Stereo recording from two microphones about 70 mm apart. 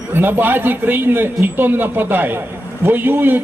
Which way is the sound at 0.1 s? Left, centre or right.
Right.